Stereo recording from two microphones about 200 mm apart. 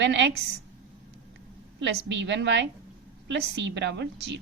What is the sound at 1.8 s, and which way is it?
A woman's voice, 65° right (ahead or behind).